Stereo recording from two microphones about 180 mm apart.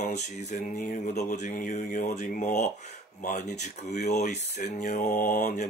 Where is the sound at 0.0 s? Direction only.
40° left (ahead or behind).